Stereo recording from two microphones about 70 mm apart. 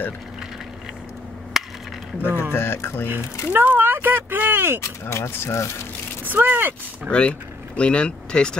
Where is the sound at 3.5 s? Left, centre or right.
Right.